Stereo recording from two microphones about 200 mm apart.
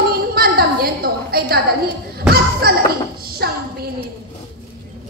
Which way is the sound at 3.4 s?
50° right (ahead or behind).